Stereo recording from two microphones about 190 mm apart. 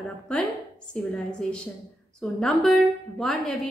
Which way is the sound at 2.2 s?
Centre (ahead or behind).